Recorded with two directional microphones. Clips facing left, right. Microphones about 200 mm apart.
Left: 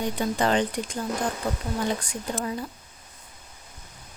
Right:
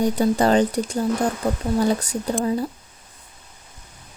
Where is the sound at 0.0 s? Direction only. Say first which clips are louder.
Right 7 dB; 40° right (ahead or behind).